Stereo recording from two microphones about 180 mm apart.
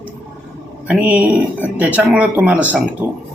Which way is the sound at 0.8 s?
5° right (ahead or behind).